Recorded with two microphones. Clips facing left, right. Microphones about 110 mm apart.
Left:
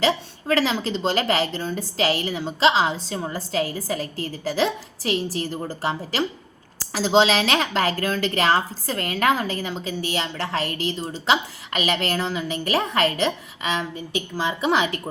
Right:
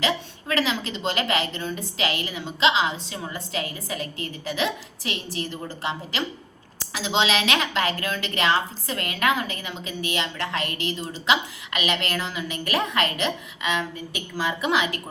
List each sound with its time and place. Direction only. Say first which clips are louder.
0.0 s speech: left 4 dB; 35° left (ahead or behind)